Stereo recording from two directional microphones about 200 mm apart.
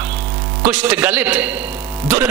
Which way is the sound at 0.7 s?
5° right (ahead or behind).